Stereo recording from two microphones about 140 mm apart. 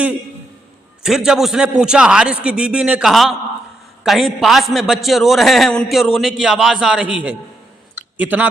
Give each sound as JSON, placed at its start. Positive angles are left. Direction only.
{"t": 1.0, "sound": "a man's voice", "side_deg": -5}